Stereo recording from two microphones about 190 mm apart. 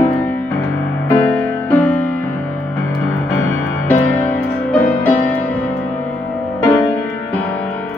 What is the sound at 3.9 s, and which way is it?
Music, 10° left (ahead or behind).